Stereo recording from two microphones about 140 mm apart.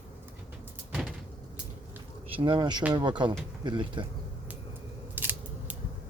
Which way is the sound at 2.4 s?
35° right (ahead or behind).